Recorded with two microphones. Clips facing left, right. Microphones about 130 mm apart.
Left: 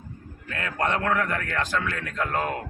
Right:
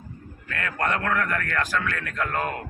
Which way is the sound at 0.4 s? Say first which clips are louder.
Even; 20° left (ahead or behind).